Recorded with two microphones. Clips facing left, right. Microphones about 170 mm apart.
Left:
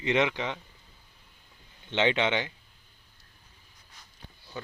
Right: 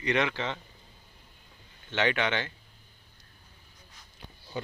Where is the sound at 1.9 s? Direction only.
20° left (ahead or behind).